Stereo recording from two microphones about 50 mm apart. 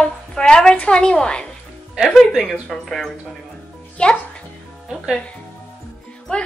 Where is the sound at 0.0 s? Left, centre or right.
Centre.